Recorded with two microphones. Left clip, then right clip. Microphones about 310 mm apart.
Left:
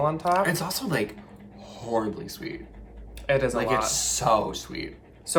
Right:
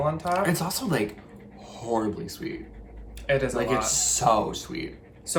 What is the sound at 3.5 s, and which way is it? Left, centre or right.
Speech, centre.